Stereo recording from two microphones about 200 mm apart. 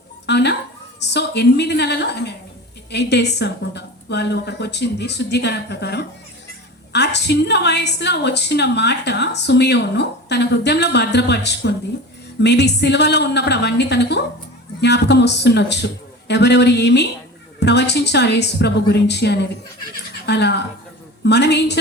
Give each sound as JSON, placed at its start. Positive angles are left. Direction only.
{"t": 0.3, "sound": "a woman's voice", "side_deg": 55}